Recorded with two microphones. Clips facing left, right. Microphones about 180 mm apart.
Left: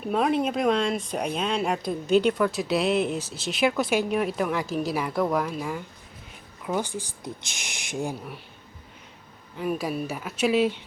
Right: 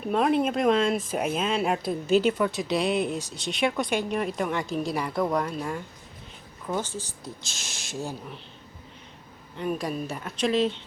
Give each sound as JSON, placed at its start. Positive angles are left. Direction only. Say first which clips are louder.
{"t": 0.0, "sound": "speech", "louder": "right 1 dB", "side_deg": 0}
{"t": 6.7, "sound": "speech", "louder": "left 2 dB", "side_deg": 15}
{"t": 9.6, "sound": "speech", "louder": "left 1 dB", "side_deg": 5}